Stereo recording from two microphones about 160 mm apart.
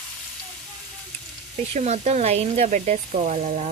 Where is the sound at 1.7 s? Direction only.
45° right (ahead or behind).